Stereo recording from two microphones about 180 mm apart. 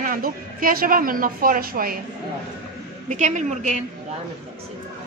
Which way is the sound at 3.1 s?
40° right (ahead or behind).